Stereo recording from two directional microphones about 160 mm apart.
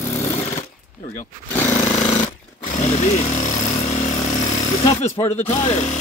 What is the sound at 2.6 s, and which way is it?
Power tool, 45° left (ahead or behind).